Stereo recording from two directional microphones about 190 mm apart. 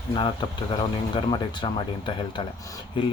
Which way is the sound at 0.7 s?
25° left (ahead or behind).